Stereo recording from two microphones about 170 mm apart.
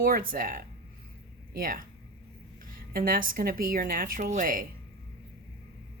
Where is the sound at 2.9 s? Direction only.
55° right (ahead or behind).